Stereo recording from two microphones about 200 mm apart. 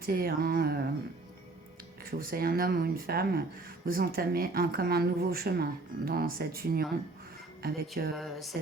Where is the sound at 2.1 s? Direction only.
50° right (ahead or behind).